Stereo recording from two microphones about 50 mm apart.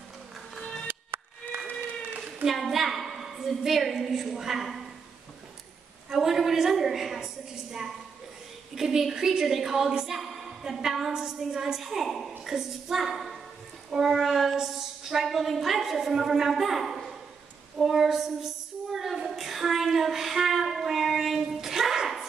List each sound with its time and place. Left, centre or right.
0.8 s music: right
2.4 s a woman's voice: centre
6.1 s a woman's voice: centre
8.7 s a woman's voice: centre
17.7 s child singing: centre
21.5 s dog: centre